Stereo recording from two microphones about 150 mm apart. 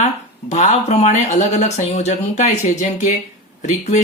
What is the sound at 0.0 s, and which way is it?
Speech, 50° left (ahead or behind).